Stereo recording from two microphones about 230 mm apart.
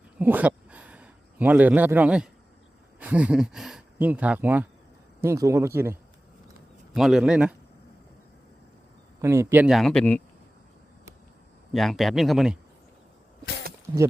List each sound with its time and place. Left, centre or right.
0.2 s a sound: centre
3.0 s speech: centre
9.2 s speech: centre
11.7 s speech: centre
13.9 s speech: centre